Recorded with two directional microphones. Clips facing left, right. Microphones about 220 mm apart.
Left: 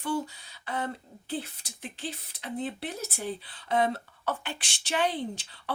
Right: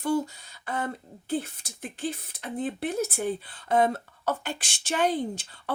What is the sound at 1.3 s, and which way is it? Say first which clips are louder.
Speech: right 5 dB; 45° right (ahead or behind).